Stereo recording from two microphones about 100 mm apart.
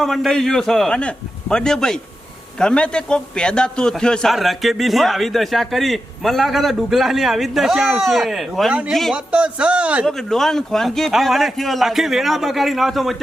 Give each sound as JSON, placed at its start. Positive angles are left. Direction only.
{"t": 0.0, "sound": "a man's voice", "side_deg": 0}
{"t": 9.1, "sound": "speech", "side_deg": -10}
{"t": 10.1, "sound": "a man's voice", "side_deg": 5}